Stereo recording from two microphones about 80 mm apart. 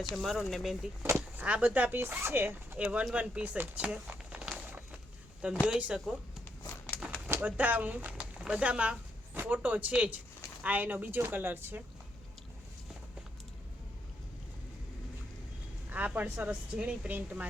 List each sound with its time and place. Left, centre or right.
0.1 s speech: centre
1.4 s speech: centre
3.8 s a sound: centre
5.4 s speech: centre
7.4 s speech: right
15.9 s speech: right